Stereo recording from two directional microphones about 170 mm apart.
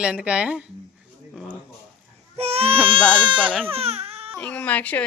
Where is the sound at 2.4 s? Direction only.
35° right (ahead or behind).